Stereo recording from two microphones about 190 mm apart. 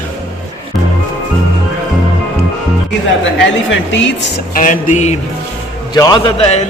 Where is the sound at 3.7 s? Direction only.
80° left.